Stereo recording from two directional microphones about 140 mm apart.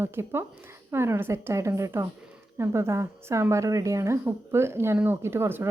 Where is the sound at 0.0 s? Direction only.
15° right (ahead or behind).